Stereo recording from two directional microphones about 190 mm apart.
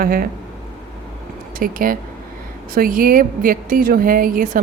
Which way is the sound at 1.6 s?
50° right (ahead or behind).